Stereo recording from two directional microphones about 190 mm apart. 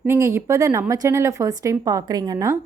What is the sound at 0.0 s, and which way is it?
Speech, 15° right (ahead or behind).